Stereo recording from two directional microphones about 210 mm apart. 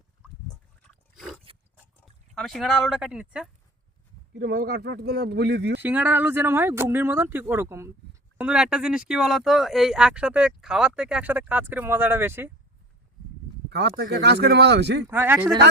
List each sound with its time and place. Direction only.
1.1 s a sound: centre (ahead or behind)
2.3 s speech: centre (ahead or behind)
4.4 s speech: 45° right (ahead or behind)
5.8 s speech: 10° right (ahead or behind)
13.7 s speech: 55° right (ahead or behind)
15.0 s speech: 10° right (ahead or behind)